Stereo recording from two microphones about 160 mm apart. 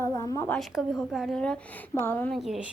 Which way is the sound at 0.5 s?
Centre (ahead or behind).